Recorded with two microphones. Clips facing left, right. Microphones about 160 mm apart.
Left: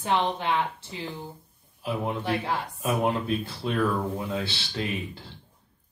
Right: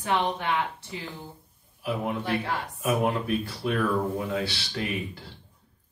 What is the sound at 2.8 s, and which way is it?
Speech, 30° left (ahead or behind).